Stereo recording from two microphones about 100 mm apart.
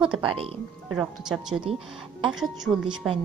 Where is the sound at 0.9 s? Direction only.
5° right (ahead or behind).